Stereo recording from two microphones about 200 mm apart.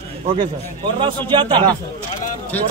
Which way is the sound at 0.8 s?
25° right (ahead or behind).